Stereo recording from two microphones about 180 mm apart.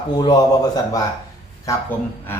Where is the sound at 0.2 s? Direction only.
25° left (ahead or behind).